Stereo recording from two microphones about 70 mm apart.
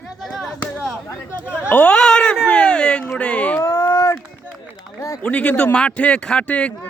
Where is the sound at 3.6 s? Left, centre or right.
Left.